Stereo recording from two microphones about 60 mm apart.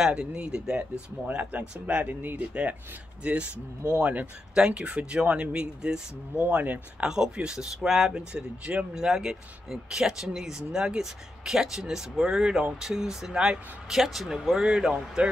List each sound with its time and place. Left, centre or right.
0.0 s speech: centre
4.6 s speech: centre
6.3 s speech: right
7.0 s speech: centre
8.3 s speech: centre